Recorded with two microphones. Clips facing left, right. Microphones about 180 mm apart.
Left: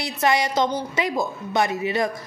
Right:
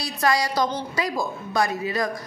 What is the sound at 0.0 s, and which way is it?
A woman's voice, 20° left (ahead or behind).